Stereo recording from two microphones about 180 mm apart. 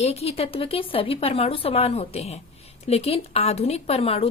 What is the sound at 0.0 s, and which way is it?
A woman's voice, 35° left (ahead or behind).